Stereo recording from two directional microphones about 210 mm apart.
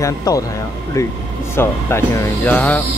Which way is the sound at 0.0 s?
15° left (ahead or behind).